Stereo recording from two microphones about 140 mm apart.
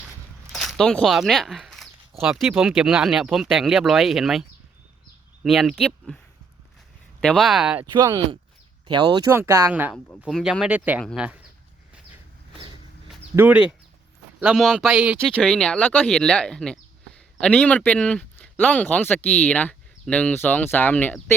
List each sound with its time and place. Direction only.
0.5 s speech: centre (ahead or behind)
7.2 s speech: 5° left (ahead or behind)
7.9 s speech: 30° right (ahead or behind)
9.9 s speech: 10° left (ahead or behind); by 11.0 s 10° right (ahead or behind)
13.3 s speech: 10° right (ahead or behind)
15.4 s speech: 5° left (ahead or behind)